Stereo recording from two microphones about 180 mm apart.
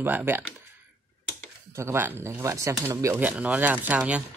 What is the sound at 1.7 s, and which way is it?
Speech, 15° right (ahead or behind).